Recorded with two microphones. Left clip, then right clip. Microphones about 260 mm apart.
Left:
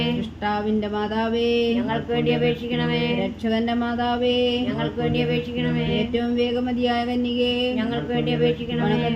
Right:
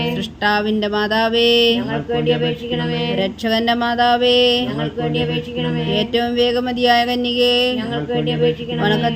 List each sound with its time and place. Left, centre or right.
0.4 s music: right
2.1 s speech: centre
3.2 s music: right
6.0 s music: right
8.1 s speech: centre